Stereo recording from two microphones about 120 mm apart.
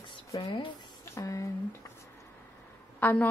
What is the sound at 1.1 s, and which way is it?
Speech, 25° left (ahead or behind).